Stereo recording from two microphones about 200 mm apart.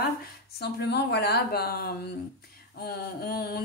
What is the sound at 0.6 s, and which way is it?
A woman's voice, 55° left (ahead or behind).